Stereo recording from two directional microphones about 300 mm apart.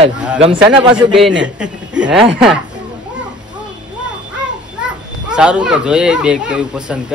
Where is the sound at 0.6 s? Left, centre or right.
Centre.